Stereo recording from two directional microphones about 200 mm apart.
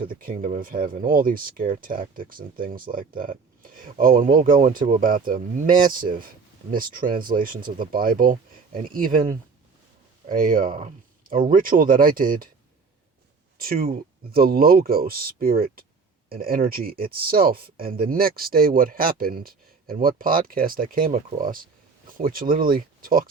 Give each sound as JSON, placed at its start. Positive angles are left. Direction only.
{"t": 0.1, "sound": "speech", "side_deg": -45}
{"t": 13.6, "sound": "speech", "side_deg": -45}